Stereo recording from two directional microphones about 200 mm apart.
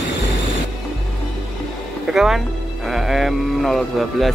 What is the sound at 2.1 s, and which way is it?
A man's voice, 5° right (ahead or behind).